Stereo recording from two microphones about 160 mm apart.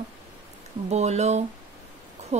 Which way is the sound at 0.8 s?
45° right (ahead or behind).